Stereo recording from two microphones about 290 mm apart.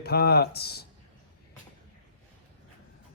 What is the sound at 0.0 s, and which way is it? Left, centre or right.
Speech, left.